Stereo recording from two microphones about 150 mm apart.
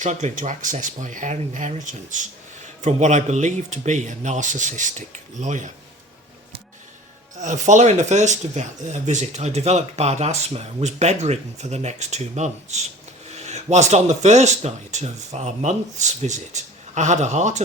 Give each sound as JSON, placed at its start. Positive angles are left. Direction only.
{"t": 0.0, "sound": "speech", "side_deg": -50}
{"t": 7.3, "sound": "speech", "side_deg": -50}